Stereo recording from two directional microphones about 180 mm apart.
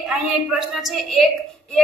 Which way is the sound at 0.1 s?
Centre (ahead or behind).